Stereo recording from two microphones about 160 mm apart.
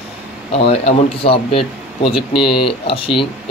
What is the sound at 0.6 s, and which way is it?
Speech, 35° left (ahead or behind).